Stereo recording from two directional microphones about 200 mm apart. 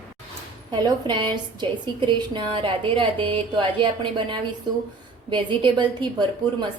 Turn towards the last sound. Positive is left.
turn(degrees=-20)  # may be behind; listen again after turning